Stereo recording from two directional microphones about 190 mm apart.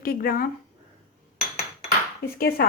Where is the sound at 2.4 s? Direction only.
55° left (ahead or behind).